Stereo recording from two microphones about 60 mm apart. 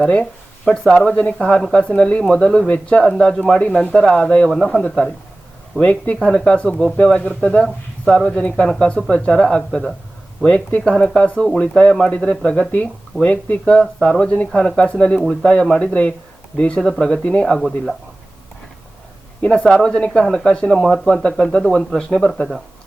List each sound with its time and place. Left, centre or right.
0.0 s speech: centre
0.6 s speech: centre
4.4 s speech: centre
4.8 s speech: centre
16.8 s speech: centre
17.1 s speech: centre
19.4 s speech: centre